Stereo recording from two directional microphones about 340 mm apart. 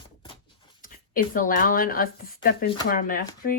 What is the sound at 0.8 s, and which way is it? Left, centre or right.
Speech, left.